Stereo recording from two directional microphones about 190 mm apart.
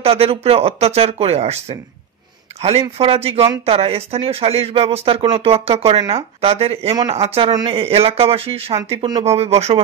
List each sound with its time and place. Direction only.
0.0 s speech: 30° right (ahead or behind)
7.0 s speech: 20° right (ahead or behind)
7.2 s speech: 30° right (ahead or behind)